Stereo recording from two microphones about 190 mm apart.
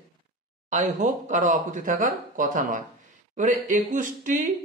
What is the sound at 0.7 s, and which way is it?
Speech, 40° right (ahead or behind).